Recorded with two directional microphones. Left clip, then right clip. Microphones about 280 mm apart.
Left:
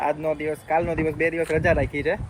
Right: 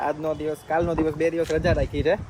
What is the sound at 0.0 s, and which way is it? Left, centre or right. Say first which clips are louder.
Speech: left 2 dB; centre.